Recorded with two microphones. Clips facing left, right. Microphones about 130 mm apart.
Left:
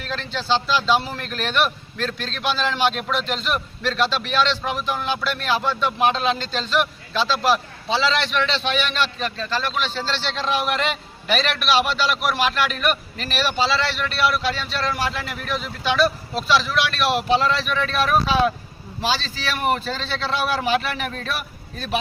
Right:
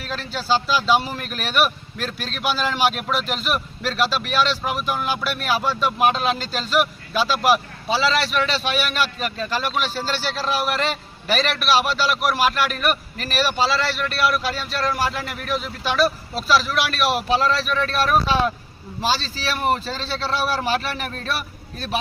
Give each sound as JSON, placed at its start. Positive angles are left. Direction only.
{"t": 0.0, "sound": "speech", "side_deg": -5}
{"t": 19.0, "sound": "a man's voice", "side_deg": -40}